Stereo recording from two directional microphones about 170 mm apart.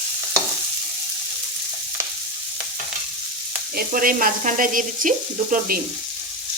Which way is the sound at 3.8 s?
55° right (ahead or behind).